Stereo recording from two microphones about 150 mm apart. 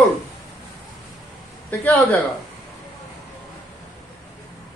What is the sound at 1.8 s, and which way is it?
Speech, 10° left (ahead or behind).